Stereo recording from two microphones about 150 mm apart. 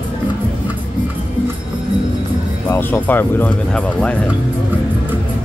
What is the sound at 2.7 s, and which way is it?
Speech, 15° left (ahead or behind).